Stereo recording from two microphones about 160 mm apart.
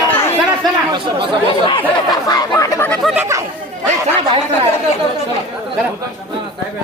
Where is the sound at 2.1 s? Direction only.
25° left (ahead or behind).